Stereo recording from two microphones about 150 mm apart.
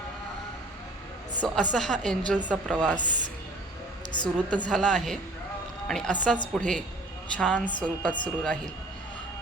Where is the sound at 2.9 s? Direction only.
55° right (ahead or behind).